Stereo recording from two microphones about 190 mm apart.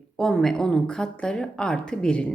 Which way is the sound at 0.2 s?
Centre (ahead or behind).